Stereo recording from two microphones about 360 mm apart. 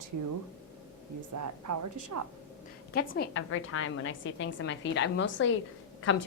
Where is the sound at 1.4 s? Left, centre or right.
Right.